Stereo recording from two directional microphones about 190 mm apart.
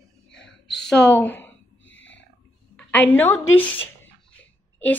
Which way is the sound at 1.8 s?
75° left (ahead or behind).